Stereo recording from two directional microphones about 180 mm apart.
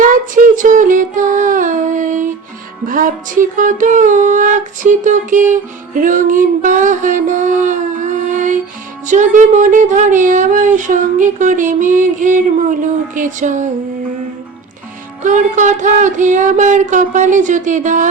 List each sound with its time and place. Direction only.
0.1 s a sound: 50° right (ahead or behind)
2.8 s music: 50° right (ahead or behind)
15.2 s music: 45° right (ahead or behind)